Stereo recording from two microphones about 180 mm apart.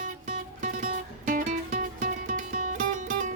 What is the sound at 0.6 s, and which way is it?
Music, 45° right (ahead or behind).